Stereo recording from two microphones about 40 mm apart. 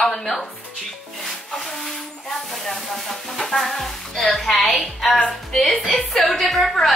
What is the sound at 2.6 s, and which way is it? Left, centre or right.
Music, centre.